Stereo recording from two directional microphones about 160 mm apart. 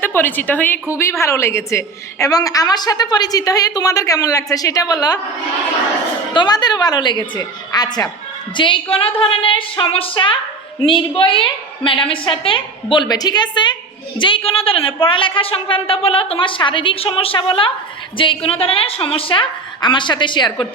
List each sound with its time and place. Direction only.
0.0 s a woman's voice: 15° left (ahead or behind)
6.3 s a woman's voice: 25° left (ahead or behind)